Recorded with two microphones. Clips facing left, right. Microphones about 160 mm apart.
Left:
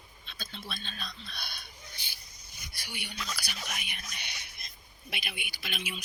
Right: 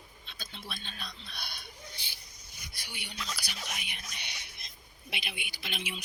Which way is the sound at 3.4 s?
20° right (ahead or behind).